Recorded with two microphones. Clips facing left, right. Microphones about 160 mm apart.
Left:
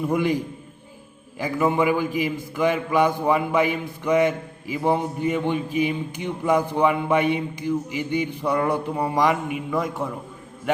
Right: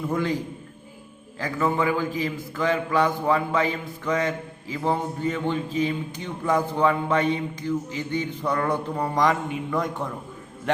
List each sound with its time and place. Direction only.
0.0 s a man's voice: 15° left (ahead or behind)
1.4 s a man's voice: 15° left (ahead or behind)